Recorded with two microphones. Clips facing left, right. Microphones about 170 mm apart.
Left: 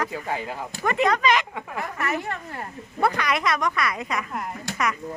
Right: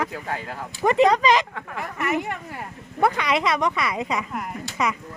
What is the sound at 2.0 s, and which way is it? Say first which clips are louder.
Speech: right 4 dB; 15° right (ahead or behind).